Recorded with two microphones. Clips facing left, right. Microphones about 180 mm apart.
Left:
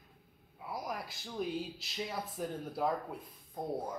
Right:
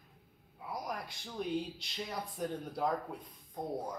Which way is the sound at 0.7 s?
5° left (ahead or behind).